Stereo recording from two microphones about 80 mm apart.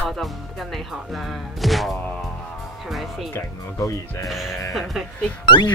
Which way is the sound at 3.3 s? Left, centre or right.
Left.